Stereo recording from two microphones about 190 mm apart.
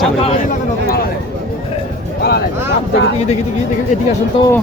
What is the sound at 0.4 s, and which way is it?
Speech, 50° left (ahead or behind).